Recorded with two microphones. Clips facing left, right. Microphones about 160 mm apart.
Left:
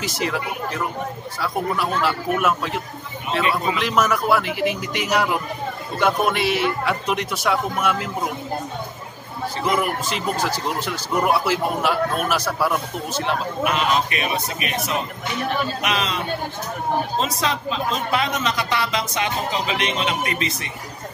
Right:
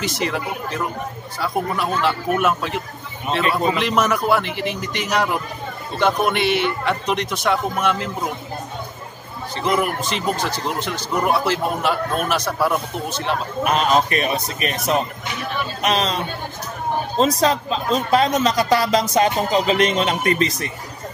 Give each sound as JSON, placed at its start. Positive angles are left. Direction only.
{"t": 0.0, "sound": "a man's voice", "side_deg": 0}
{"t": 9.6, "sound": "a man's voice", "side_deg": 5}
{"t": 13.7, "sound": "a man's voice", "side_deg": -40}
{"t": 17.2, "sound": "a man's voice", "side_deg": -40}